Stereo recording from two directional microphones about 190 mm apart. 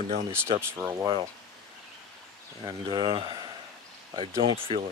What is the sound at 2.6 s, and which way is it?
Speech, 25° right (ahead or behind).